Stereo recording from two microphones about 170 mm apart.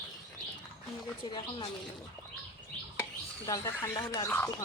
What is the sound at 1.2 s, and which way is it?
Speech, 30° left (ahead or behind).